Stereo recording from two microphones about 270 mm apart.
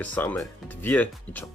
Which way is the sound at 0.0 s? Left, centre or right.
Centre.